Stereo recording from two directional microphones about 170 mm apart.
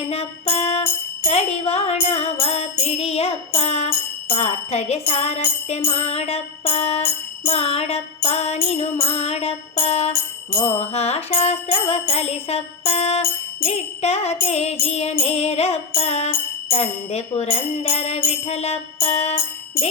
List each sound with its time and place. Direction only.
0.1 s music: 35° left (ahead or behind)